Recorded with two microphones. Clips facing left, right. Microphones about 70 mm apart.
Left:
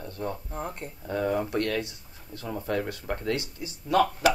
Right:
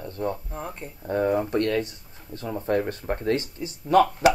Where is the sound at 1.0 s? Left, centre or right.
Right.